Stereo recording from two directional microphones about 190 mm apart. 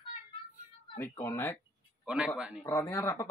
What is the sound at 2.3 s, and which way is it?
Speech, 5° right (ahead or behind).